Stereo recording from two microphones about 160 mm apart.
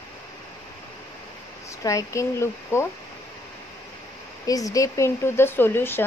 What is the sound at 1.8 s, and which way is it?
Speech, 20° left (ahead or behind).